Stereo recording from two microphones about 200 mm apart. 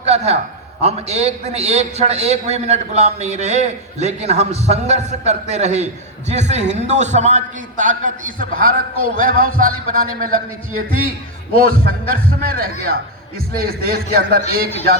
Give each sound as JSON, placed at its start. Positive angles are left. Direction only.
{"t": 0.0, "sound": "a man's voice", "side_deg": -30}